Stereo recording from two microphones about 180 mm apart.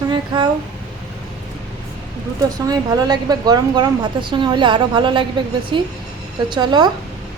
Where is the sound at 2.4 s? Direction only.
20° right (ahead or behind).